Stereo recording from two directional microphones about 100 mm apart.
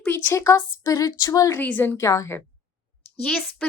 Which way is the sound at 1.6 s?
20° left (ahead or behind).